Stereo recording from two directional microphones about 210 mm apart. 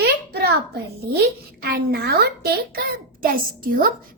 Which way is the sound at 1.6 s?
50° right (ahead or behind).